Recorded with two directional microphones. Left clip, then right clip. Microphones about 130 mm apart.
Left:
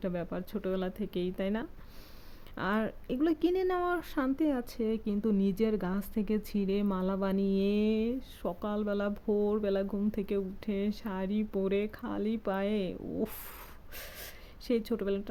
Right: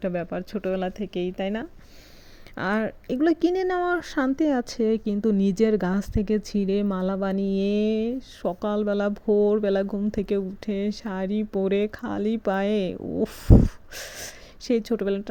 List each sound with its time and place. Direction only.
0.0 s speech: 25° right (ahead or behind)
2.6 s speech: 35° right (ahead or behind)